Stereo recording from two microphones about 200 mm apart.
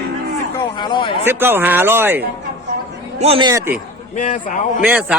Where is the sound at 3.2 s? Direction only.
30° right (ahead or behind).